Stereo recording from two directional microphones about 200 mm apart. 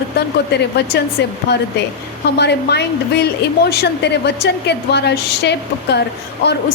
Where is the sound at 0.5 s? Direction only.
55° left (ahead or behind).